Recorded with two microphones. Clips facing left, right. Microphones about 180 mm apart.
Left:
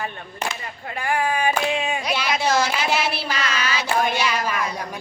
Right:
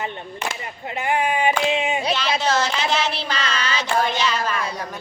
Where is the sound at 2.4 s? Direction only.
10° left (ahead or behind).